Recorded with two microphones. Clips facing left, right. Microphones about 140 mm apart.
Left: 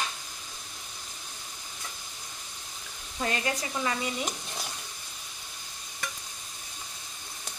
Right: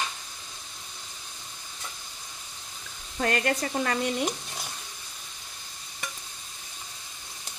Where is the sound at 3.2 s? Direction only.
65° right (ahead or behind).